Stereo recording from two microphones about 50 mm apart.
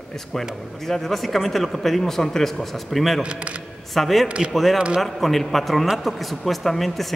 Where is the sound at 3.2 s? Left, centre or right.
Right.